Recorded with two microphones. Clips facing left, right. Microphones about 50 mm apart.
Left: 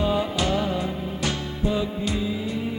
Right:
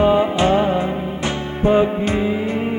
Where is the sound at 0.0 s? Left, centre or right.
Right.